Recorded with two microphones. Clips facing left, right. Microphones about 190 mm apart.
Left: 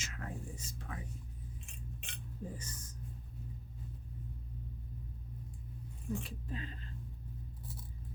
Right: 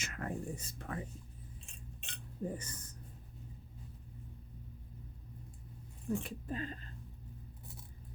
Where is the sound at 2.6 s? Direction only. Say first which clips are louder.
Left 1 dB; 60° right (ahead or behind).